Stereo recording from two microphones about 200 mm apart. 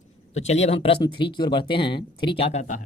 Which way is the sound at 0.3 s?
35° left (ahead or behind).